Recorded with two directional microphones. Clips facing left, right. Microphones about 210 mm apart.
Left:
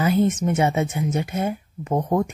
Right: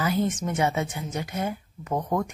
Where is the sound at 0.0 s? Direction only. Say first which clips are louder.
Left 6 dB; 25° left (ahead or behind).